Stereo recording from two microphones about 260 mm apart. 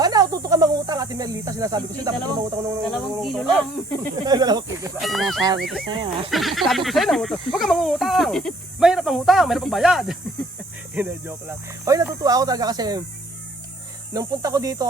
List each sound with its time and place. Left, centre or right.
0.0 s speech: centre
2.9 s speech: centre
4.3 s speech: centre
4.9 s speech: centre
5.9 s speech: centre
6.3 s speech: centre
14.1 s speech: centre